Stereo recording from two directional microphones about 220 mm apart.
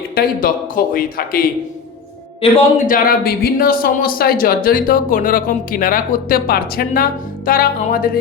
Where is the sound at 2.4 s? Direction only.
25° left (ahead or behind).